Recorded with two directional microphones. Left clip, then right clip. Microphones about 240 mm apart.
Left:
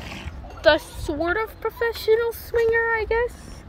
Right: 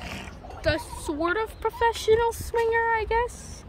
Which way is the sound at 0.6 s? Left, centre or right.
Centre.